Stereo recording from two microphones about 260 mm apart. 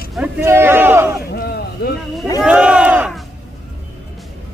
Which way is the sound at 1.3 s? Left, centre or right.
Left.